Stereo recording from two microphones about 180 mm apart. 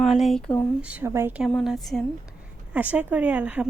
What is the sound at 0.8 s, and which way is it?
Speech, 10° right (ahead or behind).